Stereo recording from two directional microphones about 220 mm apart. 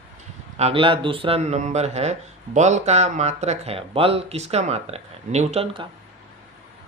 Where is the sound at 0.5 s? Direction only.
25° right (ahead or behind).